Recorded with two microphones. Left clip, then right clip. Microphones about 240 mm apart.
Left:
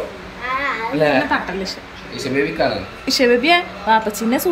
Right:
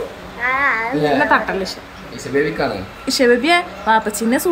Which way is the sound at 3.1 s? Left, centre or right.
Centre.